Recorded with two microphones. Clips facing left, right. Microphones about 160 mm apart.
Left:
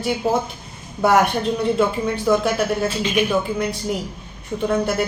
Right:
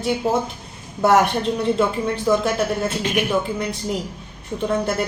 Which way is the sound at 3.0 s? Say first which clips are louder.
Left 2 dB; 65° right (ahead or behind).